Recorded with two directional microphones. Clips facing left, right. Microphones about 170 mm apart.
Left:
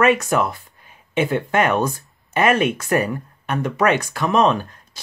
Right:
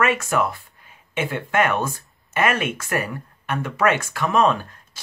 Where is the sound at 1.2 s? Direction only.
35° left (ahead or behind).